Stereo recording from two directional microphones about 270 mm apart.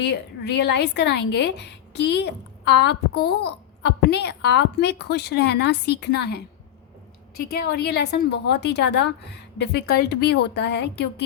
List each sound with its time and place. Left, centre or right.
0.0 s a woman's voice: left